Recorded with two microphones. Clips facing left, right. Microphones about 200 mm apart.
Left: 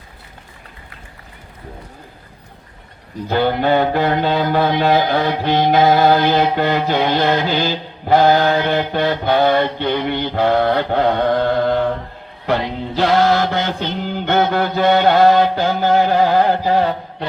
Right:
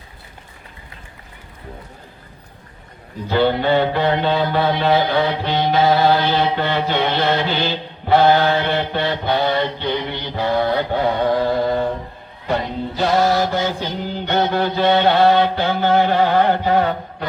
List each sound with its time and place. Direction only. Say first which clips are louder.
3.2 s music: even; 45° left (ahead or behind); by 11.8 s 65° left (ahead or behind)
12.5 s music: left 3 dB; 85° left
13.0 s mantra: left 2 dB; 80° left
14.3 s mantra: left 2 dB; 50° left (ahead or behind); by 17.2 s 30° left (ahead or behind)